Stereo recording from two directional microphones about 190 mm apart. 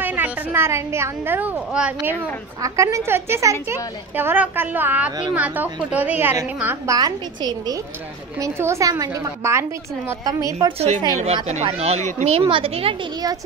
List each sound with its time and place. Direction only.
0.0 s a woman's voice: 10° right (ahead or behind)
2.6 s a woman's voice: 15° right (ahead or behind)
11.1 s a woman's voice: 35° right (ahead or behind)